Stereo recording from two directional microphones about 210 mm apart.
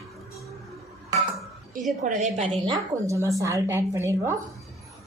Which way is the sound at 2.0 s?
35° right (ahead or behind).